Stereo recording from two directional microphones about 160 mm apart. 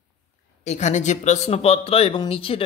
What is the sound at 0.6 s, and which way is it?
Speech, 45° left (ahead or behind).